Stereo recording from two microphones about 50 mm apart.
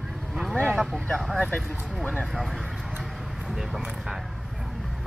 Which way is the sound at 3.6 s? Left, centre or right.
Centre.